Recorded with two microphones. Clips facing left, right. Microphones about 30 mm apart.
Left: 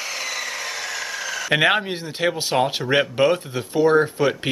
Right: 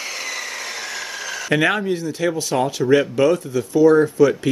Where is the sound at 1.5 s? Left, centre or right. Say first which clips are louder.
Even; left.